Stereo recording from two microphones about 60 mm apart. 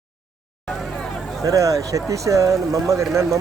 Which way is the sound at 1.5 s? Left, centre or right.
Right.